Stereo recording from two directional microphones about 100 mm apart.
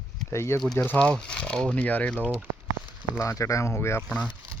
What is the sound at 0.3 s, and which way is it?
Speech, 25° left (ahead or behind).